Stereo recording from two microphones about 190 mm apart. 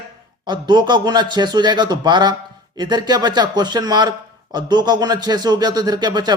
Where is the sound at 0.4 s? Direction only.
25° right (ahead or behind).